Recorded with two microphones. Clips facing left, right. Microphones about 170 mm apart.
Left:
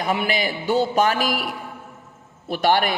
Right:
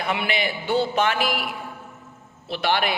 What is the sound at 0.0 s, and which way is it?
A man's voice, 40° left (ahead or behind).